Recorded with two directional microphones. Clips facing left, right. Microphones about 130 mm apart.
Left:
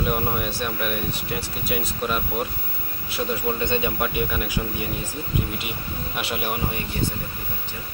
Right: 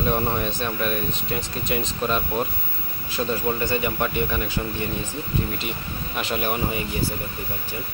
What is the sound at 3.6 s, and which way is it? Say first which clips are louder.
Speech: even; 20° left (ahead or behind).